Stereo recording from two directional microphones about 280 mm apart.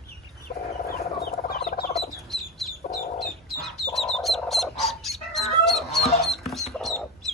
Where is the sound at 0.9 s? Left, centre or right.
Left.